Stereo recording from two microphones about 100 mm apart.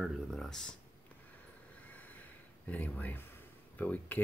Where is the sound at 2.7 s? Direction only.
15° left (ahead or behind).